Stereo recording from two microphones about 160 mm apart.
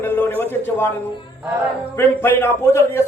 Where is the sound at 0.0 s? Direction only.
15° left (ahead or behind).